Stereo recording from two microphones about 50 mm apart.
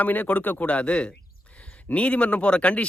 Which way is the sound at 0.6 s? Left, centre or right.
Left.